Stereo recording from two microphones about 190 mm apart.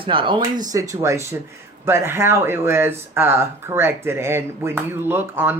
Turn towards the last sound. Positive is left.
turn(degrees=-10)  # may be behind; listen again after turning